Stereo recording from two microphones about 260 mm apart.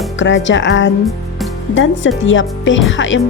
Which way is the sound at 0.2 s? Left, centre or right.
Left.